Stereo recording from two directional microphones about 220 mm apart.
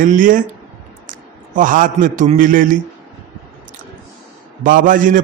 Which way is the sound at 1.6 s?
35° right (ahead or behind).